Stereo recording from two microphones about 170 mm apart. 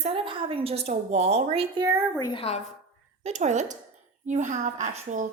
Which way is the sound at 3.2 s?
45° right (ahead or behind).